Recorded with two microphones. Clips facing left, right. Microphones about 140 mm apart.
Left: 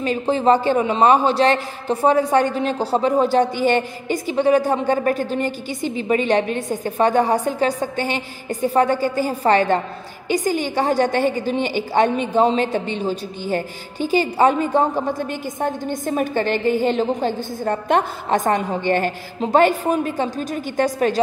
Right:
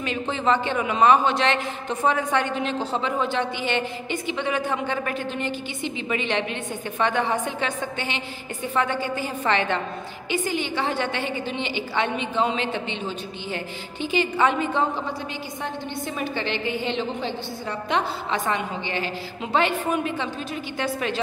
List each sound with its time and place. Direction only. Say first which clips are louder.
0.0 s a man's voice: left 7 dB; 40° left (ahead or behind)